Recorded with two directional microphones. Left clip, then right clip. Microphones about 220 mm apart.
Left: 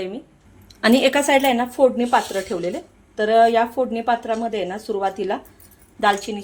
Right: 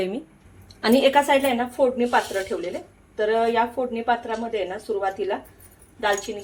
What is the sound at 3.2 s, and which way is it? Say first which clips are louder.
A woman's voice: left 5 dB; 50° left (ahead or behind).